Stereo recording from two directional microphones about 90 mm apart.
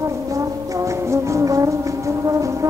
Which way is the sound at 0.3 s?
35° right (ahead or behind).